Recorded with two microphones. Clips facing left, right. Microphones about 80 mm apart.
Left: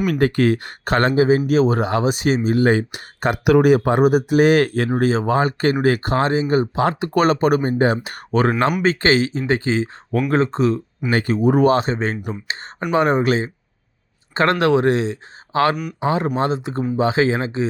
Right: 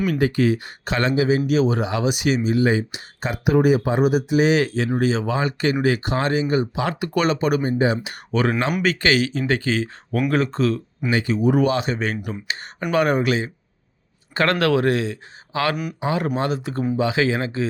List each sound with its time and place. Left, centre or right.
0.0 s speech: left
11.1 s speech: left